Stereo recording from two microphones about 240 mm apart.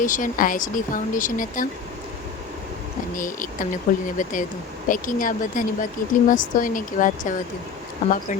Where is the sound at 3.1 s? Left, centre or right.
Left.